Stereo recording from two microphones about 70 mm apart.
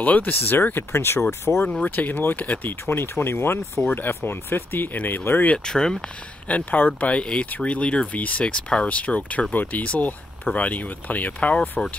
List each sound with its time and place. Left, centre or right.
0.0 s speech: left
1.5 s speech: centre
5.7 s speech: centre
6.5 s speech: left